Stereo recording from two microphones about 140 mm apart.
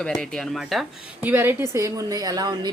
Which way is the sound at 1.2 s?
15° right (ahead or behind).